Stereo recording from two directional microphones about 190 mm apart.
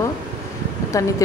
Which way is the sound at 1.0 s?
15° left (ahead or behind).